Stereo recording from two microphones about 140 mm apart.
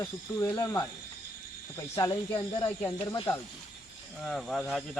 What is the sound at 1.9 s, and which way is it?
Speech, 30° left (ahead or behind).